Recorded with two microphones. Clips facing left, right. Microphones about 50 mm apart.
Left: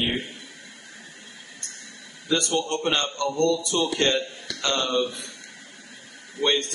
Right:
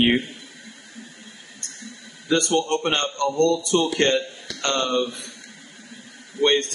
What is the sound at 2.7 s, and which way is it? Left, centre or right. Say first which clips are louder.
Speech: right 2 dB; right.